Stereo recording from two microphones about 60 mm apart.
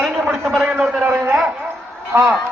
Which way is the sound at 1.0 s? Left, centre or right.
Right.